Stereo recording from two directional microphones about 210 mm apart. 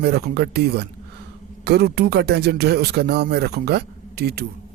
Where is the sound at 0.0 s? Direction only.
50° right (ahead or behind).